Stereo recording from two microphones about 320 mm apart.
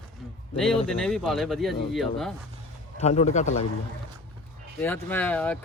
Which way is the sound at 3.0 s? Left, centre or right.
Centre.